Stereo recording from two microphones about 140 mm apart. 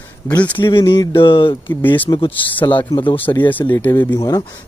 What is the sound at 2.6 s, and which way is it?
Speech, 10° left (ahead or behind).